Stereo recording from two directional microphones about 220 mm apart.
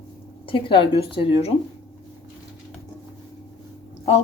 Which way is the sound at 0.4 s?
25° left (ahead or behind).